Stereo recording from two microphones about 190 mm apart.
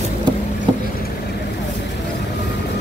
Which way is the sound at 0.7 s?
25° right (ahead or behind).